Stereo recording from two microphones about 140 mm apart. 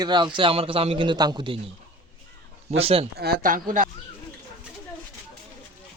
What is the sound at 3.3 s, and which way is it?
Speech, 75° right (ahead or behind).